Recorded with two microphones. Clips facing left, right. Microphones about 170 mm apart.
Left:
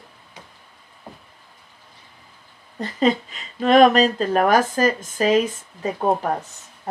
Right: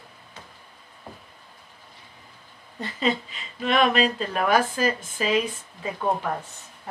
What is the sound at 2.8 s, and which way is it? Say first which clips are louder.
Speech: left 6 dB; 45° left (ahead or behind).